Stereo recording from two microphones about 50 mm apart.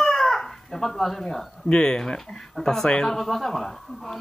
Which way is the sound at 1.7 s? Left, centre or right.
Centre.